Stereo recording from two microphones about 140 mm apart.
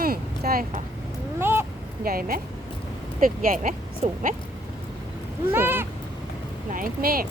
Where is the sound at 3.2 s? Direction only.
80° right.